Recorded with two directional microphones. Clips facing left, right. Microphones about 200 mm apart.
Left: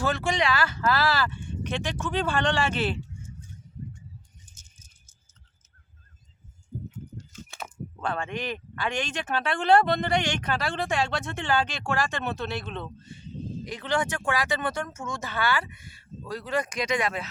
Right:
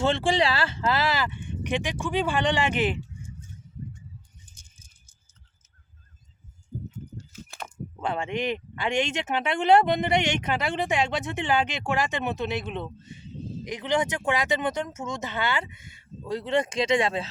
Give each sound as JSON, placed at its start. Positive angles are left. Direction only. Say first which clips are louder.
{"t": 0.0, "sound": "speech", "louder": "right 3 dB", "side_deg": -30}
{"t": 7.2, "sound": "a sound", "louder": "even", "side_deg": 0}
{"t": 8.0, "sound": "speech", "louder": "right 3 dB", "side_deg": -20}